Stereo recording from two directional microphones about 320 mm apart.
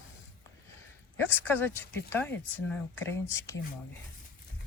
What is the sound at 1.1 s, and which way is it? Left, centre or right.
Speech, centre.